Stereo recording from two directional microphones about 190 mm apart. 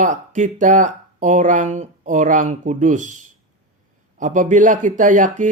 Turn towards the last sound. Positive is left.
turn(degrees=-40)  # may be behind; listen again after turning